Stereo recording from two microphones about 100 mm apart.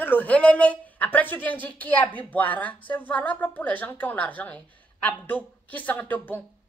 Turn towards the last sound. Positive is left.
turn(degrees=15)  # may be behind; listen again after turning